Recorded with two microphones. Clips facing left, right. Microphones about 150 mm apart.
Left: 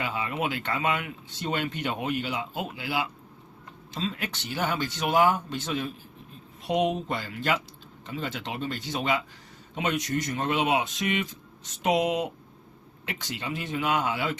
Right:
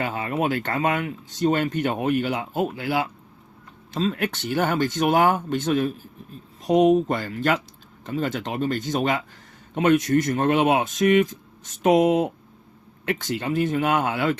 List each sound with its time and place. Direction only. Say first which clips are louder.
0.0 s speech: right 5 dB; 45° right (ahead or behind)
6.7 s speech: right 9 dB; 40° right (ahead or behind); by 14.3 s 55° right (ahead or behind)